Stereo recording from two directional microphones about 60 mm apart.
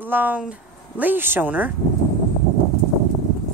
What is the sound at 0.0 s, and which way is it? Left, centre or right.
Speech, right.